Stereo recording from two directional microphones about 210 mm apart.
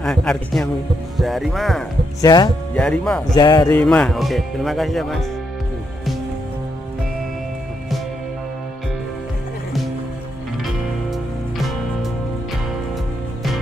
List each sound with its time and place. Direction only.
0.0 s speech: 5° left (ahead or behind)
2.2 s speech: 20° left (ahead or behind)
2.7 s speech: 5° left (ahead or behind)
3.3 s speech: 20° left (ahead or behind)
3.7 s speech: 5° left (ahead or behind)
10.6 s music: centre (ahead or behind)